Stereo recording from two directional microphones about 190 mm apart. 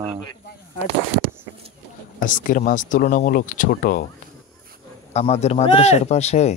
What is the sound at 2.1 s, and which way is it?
Speech, 45° left (ahead or behind).